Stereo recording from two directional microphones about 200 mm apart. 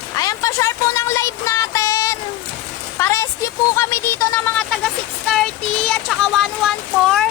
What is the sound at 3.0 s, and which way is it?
Rain on surface, 15° left (ahead or behind).